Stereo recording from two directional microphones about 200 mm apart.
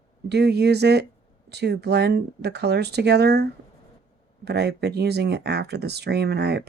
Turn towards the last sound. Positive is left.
turn(degrees=-55)  # may be behind; listen again after turning